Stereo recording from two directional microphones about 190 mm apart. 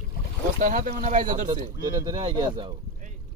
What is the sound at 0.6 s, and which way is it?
Speech, 45° right (ahead or behind).